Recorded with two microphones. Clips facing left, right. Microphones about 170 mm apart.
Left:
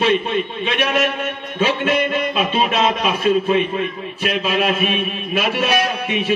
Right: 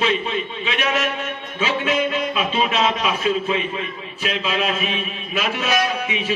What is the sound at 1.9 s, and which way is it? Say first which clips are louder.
A man's voice: left 2 dB; 60° left (ahead or behind).